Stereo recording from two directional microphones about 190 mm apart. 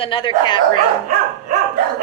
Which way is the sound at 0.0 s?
25° left (ahead or behind).